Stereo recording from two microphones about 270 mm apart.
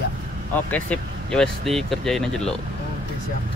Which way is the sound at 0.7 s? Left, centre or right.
Centre.